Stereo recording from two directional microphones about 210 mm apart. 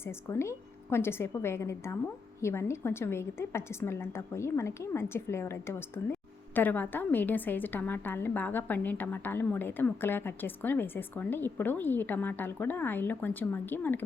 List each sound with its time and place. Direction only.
0.3 s a woman's voice: 15° left (ahead or behind)